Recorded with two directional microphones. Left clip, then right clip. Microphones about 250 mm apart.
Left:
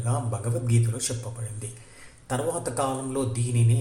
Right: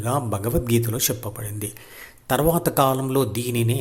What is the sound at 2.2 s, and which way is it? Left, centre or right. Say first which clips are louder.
Speech: right 8 dB; right.